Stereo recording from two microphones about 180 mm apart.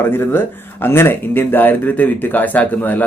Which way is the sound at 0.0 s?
10° left (ahead or behind).